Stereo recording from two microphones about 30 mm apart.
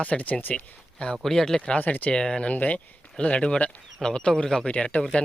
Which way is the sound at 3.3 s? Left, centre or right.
Left.